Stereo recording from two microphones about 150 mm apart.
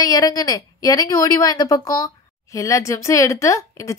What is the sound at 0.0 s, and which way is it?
A woman's voice, 25° left (ahead or behind).